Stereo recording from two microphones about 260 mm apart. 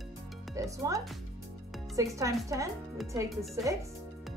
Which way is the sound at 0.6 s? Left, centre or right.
Centre.